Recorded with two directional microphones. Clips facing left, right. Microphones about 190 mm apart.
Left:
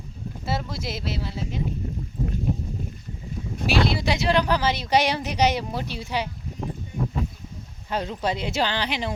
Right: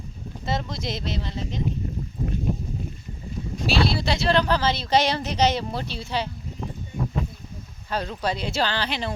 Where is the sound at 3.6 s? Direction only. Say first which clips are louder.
Left 1 dB; 15° left (ahead or behind).